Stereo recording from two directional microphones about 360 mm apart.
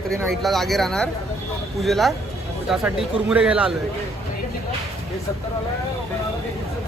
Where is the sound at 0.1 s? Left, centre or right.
Centre.